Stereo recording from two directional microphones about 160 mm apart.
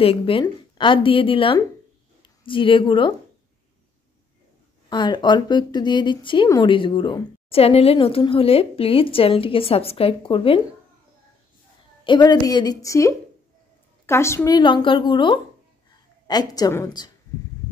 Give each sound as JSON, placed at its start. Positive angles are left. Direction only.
{"t": 0.0, "sound": "a woman's voice", "side_deg": 35}
{"t": 4.8, "sound": "a woman's voice", "side_deg": 30}
{"t": 12.0, "sound": "speech", "side_deg": 30}